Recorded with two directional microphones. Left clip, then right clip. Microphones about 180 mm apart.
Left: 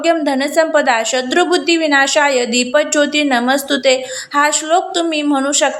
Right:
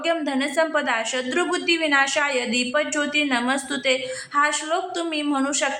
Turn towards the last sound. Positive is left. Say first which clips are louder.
# left 8 dB
turn(degrees=25)  # may be behind; listen again after turning